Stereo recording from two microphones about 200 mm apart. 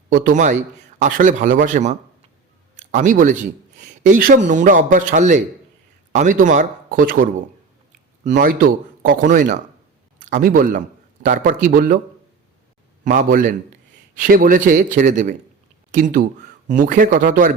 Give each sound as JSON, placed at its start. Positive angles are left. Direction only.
{"t": 0.1, "sound": "a man's voice", "side_deg": -40}
{"t": 13.1, "sound": "a man's voice", "side_deg": -45}